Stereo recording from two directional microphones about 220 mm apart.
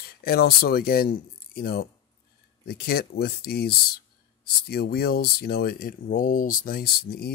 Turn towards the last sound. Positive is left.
turn(degrees=45)  # may be behind; listen again after turning